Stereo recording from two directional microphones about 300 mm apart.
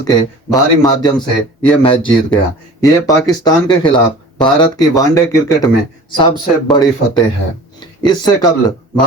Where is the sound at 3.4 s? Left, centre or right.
Centre.